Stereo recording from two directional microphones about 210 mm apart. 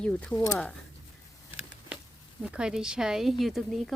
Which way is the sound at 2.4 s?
5° right (ahead or behind).